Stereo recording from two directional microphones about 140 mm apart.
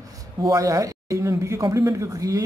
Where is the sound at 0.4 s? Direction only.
25° right (ahead or behind).